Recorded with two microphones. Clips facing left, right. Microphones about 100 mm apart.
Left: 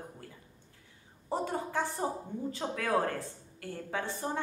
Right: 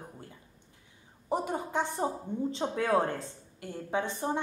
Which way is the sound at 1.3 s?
15° right (ahead or behind).